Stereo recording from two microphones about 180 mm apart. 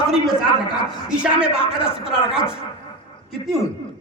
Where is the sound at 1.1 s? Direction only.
5° right (ahead or behind).